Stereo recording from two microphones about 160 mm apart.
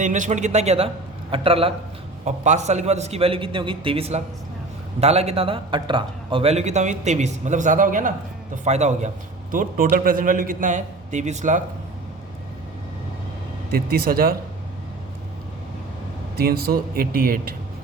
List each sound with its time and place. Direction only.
0.0 s a man's voice: 50° right (ahead or behind)
2.2 s a man's voice: 45° right (ahead or behind)
13.7 s speech: 70° right (ahead or behind)
16.4 s speech: 70° right (ahead or behind)